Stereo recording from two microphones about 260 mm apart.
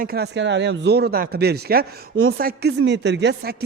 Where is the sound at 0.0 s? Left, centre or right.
Right.